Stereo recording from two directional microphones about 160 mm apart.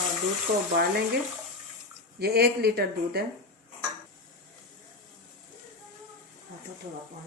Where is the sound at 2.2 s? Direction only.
80° right.